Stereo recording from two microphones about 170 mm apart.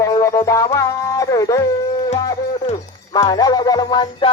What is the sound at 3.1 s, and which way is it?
Music, 20° left (ahead or behind).